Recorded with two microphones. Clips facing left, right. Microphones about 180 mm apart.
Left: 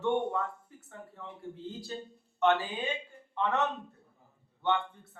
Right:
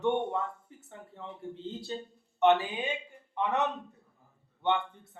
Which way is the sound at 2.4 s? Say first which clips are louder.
Right 3 dB; 20° right (ahead or behind).